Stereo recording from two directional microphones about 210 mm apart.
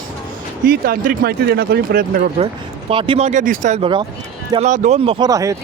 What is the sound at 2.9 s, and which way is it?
Speech, 25° right (ahead or behind).